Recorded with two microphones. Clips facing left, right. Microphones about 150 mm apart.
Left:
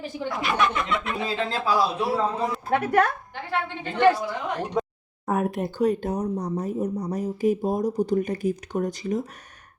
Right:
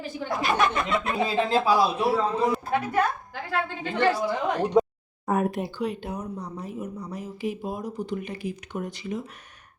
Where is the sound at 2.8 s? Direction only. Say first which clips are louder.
Left 6 dB; 75° left (ahead or behind).